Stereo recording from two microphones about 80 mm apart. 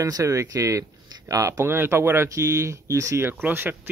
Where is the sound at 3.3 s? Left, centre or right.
Right.